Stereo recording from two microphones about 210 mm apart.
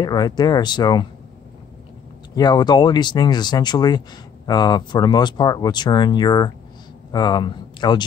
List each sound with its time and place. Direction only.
0.0 s speech: 20° left (ahead or behind)
2.3 s speech: 20° left (ahead or behind)